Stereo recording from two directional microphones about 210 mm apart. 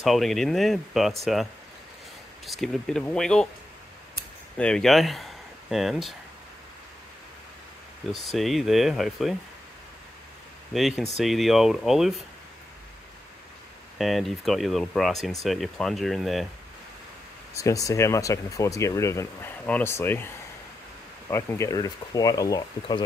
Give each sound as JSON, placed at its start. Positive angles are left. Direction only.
{"t": 0.0, "sound": "speech", "side_deg": 0}
{"t": 4.6, "sound": "speech", "side_deg": 5}
{"t": 8.1, "sound": "speech", "side_deg": 0}
{"t": 10.7, "sound": "speech", "side_deg": 0}
{"t": 13.9, "sound": "speech", "side_deg": 0}
{"t": 17.6, "sound": "speech", "side_deg": 15}